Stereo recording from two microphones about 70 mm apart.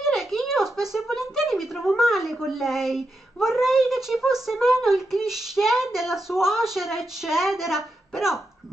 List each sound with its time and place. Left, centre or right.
0.0 s speech: centre